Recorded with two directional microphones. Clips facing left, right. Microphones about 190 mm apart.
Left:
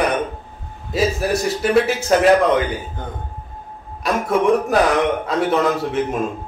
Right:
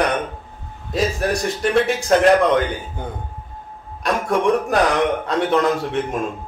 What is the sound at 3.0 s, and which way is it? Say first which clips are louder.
Speech: right 1 dB; 10° right (ahead or behind).